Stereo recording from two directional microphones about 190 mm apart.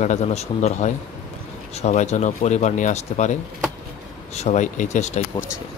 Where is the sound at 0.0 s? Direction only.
35° left (ahead or behind).